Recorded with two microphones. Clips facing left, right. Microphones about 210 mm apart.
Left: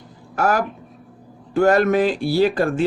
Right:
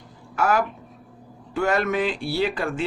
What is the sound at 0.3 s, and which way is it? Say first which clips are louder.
Speech: left 2 dB; 40° left (ahead or behind).